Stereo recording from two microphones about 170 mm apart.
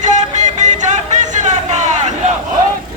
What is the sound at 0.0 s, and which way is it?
Music, 45° right (ahead or behind).